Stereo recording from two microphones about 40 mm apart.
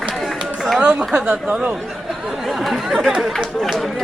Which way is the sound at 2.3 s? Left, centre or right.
Centre.